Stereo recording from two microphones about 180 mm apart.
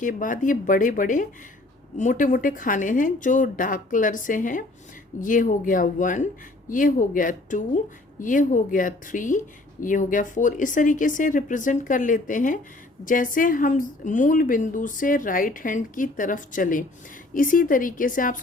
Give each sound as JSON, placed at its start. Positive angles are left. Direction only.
{"t": 0.0, "sound": "speech", "side_deg": 45}